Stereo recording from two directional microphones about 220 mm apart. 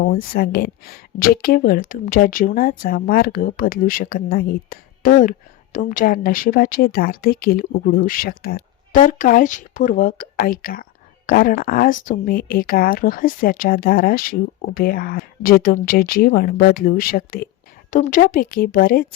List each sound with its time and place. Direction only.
0.0 s speech: 40° left (ahead or behind)